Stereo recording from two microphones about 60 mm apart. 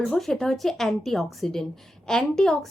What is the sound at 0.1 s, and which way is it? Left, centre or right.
A woman's voice, centre.